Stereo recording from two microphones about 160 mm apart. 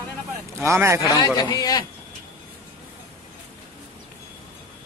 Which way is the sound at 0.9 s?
20° left (ahead or behind).